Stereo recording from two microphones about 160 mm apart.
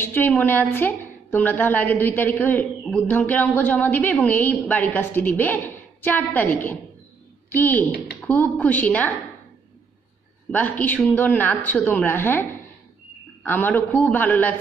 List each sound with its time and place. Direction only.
0.0 s a woman's voice: 10° left (ahead or behind)
10.5 s a woman's voice: 10° left (ahead or behind)